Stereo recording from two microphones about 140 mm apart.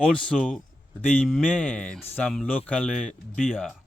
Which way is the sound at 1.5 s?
5° left (ahead or behind).